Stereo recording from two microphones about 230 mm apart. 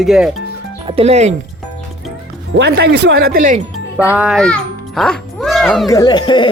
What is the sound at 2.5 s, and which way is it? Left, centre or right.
Speech, right.